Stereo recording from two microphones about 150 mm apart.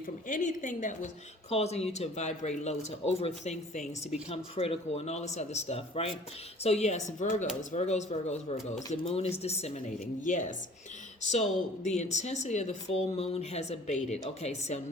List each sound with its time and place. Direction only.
0.3 s a woman's voice: 60° left (ahead or behind)
10.2 s a woman's voice: 55° left (ahead or behind)